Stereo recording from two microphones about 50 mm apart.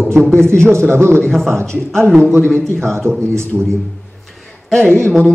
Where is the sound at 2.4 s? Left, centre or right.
Centre.